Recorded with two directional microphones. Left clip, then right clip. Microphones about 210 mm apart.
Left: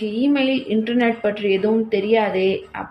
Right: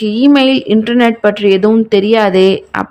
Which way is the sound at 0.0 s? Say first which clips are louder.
Right 10 dB; 55° right (ahead or behind).